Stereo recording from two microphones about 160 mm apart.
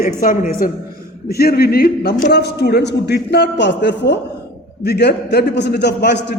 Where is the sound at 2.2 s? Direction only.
90° left.